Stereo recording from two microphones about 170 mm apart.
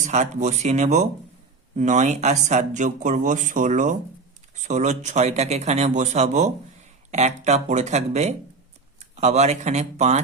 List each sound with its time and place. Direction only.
0.0 s speech: 45° right (ahead or behind)